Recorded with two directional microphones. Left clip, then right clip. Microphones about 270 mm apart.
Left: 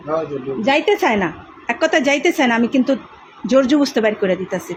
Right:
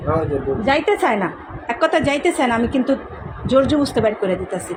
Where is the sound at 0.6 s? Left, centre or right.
Left.